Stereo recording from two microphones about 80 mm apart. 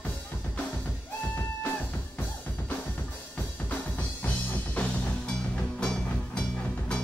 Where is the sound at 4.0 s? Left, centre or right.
Centre.